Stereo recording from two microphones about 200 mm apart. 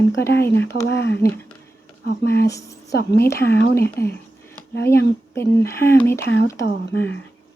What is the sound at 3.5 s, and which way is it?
Speech, 55° left (ahead or behind).